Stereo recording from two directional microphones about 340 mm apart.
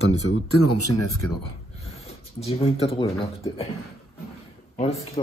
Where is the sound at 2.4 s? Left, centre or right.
Centre.